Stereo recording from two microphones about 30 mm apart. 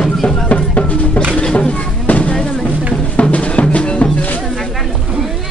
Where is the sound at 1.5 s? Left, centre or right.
Left.